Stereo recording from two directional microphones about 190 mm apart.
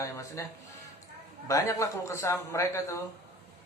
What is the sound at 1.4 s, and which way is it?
A man's voice, 15° left (ahead or behind).